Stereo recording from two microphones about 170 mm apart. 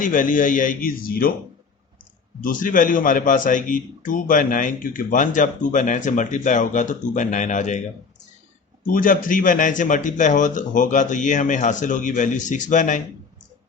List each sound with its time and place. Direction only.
0.0 s a man's voice: 50° left (ahead or behind)
2.4 s a man's voice: 50° left (ahead or behind)
8.9 s a man's voice: 55° left (ahead or behind)